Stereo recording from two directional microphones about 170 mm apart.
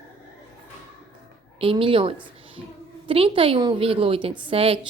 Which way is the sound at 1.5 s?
30° right (ahead or behind).